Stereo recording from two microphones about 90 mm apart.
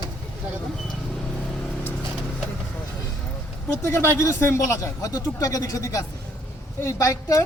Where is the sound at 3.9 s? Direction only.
30° left (ahead or behind).